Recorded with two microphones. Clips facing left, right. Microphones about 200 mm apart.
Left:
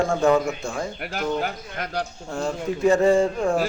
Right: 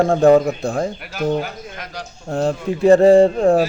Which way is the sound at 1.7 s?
60° left (ahead or behind).